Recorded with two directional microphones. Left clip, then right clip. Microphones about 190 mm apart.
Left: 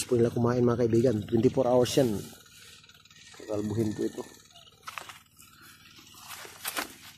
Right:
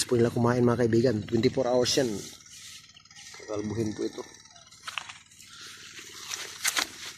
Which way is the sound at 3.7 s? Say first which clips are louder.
Left 1 dB; 20° left (ahead or behind).